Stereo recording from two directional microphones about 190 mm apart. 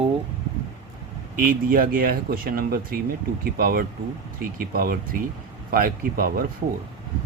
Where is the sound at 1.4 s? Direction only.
50° right (ahead or behind).